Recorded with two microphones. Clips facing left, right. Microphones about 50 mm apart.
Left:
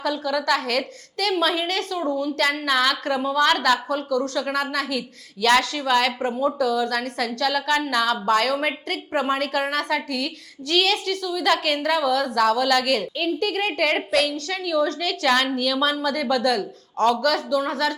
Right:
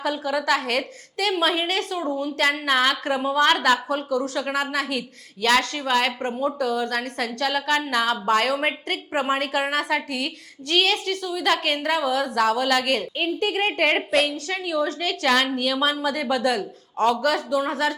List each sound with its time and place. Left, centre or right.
0.0 s a woman's voice: right
6.1 s a woman's voice: centre
6.3 s a woman's voice: centre
8.6 s a woman's voice: right
10.7 s a woman's voice: centre
13.1 s a woman's voice: right
14.1 s a woman's voice: centre